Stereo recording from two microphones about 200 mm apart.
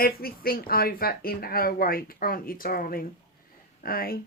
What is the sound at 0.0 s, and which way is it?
A woman's voice, 50° left (ahead or behind).